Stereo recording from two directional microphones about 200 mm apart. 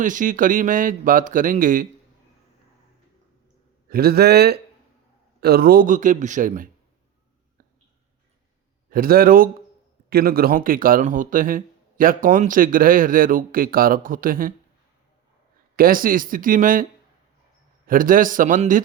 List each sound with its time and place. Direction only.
0.0 s speech: 40° right (ahead or behind)
3.8 s speech: 50° right (ahead or behind)
8.9 s speech: 45° right (ahead or behind)
15.7 s speech: 45° right (ahead or behind)
17.8 s speech: 45° right (ahead or behind)